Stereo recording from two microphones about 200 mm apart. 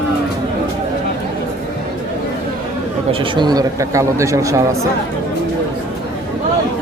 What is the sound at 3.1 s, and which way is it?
Speech, 25° right (ahead or behind).